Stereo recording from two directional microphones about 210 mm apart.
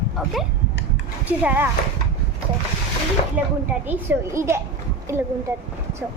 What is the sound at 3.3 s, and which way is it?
A woman's voice, 10° right (ahead or behind).